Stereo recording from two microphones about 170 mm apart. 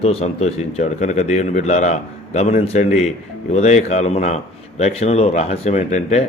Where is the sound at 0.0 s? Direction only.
35° left (ahead or behind).